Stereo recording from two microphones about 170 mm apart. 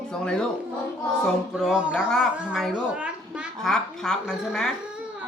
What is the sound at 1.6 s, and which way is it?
Speech, centre (ahead or behind).